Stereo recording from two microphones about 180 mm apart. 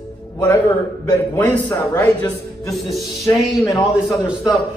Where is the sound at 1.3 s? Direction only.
5° left (ahead or behind).